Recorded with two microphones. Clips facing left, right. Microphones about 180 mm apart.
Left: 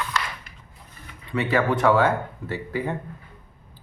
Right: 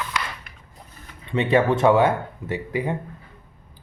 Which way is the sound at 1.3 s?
25° right (ahead or behind).